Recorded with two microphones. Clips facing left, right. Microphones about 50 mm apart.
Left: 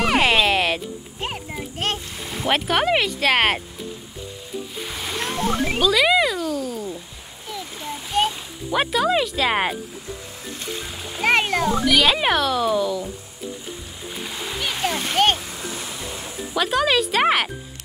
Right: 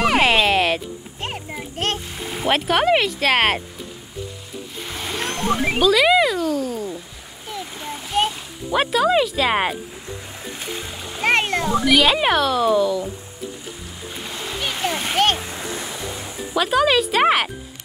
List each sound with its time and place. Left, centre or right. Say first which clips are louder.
0.0 s children playing: right 1 dB; centre
4.8 s a sound: right 3 dB; centre
8.7 s speech: right 2 dB; centre
10.6 s splash: even; centre
14.2 s splash: right 1 dB; centre
15.3 s a sound: right 3 dB; right
16.5 s speech: right 2 dB; centre